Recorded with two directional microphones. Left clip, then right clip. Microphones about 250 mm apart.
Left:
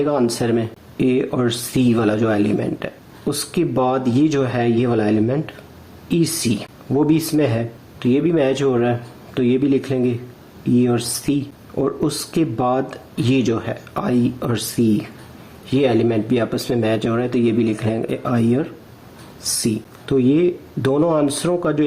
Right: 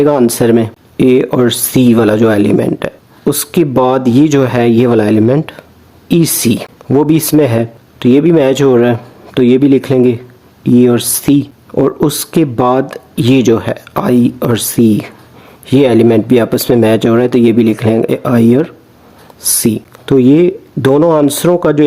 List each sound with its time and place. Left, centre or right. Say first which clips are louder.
0.0 s speech: right 10 dB; right